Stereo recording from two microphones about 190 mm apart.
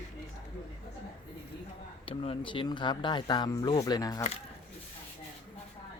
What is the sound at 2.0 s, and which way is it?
Speech, 30° left (ahead or behind).